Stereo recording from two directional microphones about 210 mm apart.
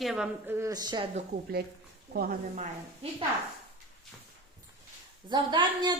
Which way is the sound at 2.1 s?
45° right (ahead or behind).